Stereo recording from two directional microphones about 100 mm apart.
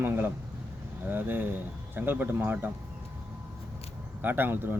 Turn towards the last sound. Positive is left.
turn(degrees=-20)  # may be behind; listen again after turning